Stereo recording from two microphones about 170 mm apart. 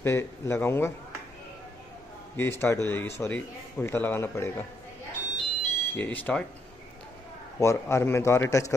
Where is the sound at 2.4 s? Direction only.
15° left (ahead or behind).